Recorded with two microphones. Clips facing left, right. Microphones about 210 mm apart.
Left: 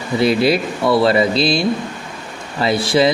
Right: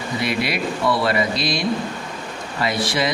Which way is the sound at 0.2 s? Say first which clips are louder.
Left 9 dB; 30° left (ahead or behind).